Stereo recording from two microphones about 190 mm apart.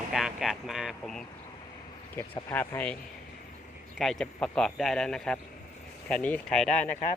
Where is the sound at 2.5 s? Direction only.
10° left (ahead or behind).